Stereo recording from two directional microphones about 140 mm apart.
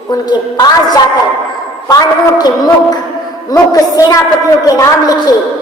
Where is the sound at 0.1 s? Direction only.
30° left (ahead or behind).